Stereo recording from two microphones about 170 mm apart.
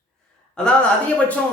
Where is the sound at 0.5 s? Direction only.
5° left (ahead or behind).